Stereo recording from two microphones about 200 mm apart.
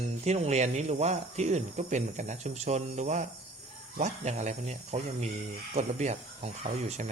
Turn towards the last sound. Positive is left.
turn(degrees=-35)  # may be behind; listen again after turning